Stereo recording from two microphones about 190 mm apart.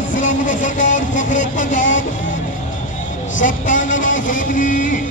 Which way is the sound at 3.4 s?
40° left (ahead or behind).